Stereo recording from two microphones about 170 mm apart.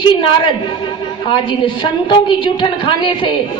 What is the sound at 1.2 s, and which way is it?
A woman's voice, 30° left (ahead or behind).